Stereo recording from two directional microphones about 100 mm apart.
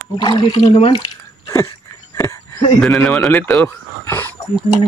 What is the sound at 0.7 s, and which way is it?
Speech, 75° left (ahead or behind).